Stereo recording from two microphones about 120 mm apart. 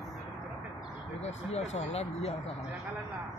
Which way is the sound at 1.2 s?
65° left (ahead or behind).